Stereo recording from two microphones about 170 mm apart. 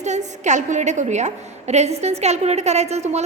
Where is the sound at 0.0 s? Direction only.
45° right (ahead or behind).